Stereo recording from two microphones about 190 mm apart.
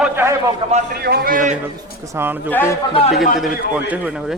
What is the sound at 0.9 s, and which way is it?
Speech, 55° right (ahead or behind).